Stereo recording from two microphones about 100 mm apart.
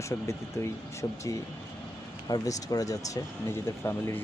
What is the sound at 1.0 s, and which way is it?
Speech, 30° left (ahead or behind).